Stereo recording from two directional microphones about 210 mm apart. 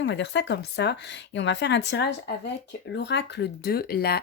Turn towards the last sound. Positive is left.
turn(degrees=50)  # may be behind; listen again after turning